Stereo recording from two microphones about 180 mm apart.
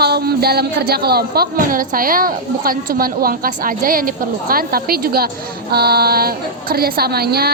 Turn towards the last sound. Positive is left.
turn(degrees=-60)  # may be behind; listen again after turning